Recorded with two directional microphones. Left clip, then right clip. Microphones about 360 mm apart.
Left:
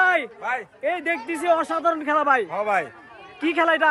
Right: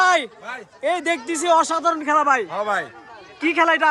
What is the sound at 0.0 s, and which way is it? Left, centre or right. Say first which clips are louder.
A man's voice: right 2 dB; centre.